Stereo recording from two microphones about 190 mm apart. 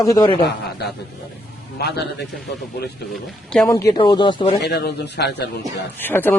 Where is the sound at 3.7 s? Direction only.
15° left (ahead or behind).